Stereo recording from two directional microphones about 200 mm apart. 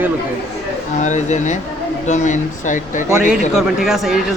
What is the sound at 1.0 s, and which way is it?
Speech, 35° left (ahead or behind).